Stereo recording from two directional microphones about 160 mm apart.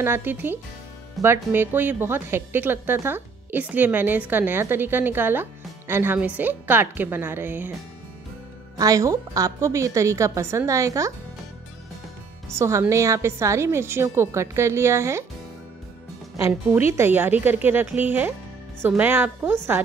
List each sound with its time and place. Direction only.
0.0 s a woman's voice: 15° right (ahead or behind)
1.2 s speech: centre (ahead or behind)
1.5 s a woman's voice: 15° right (ahead or behind)
8.7 s a woman's voice: 20° right (ahead or behind)
12.5 s a woman's voice: 15° right (ahead or behind)
16.3 s a woman's voice: 20° right (ahead or behind)